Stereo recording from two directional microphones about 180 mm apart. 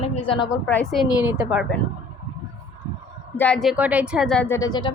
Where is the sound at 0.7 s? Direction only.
Centre (ahead or behind).